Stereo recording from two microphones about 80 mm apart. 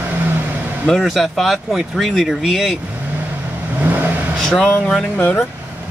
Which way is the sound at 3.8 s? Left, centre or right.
Right.